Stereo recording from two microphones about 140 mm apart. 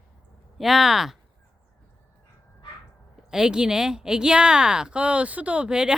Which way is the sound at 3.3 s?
5° right (ahead or behind).